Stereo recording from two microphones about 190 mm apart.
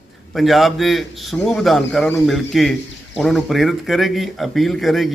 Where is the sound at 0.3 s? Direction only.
Centre (ahead or behind).